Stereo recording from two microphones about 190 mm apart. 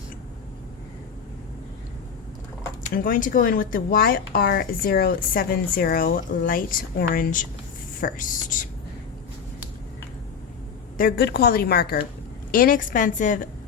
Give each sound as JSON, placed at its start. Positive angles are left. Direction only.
{"t": 2.9, "sound": "speech", "side_deg": 45}
{"t": 10.9, "sound": "a woman's voice", "side_deg": 55}